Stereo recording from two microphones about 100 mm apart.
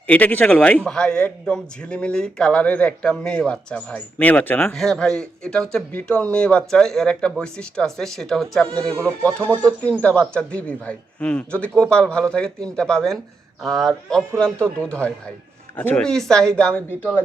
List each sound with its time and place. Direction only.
0.1 s a man's voice: 15° left (ahead or behind)
4.7 s a man's voice: 5° left (ahead or behind)
9.8 s a man's voice: 15° left (ahead or behind)
16.0 s a man's voice: 5° left (ahead or behind)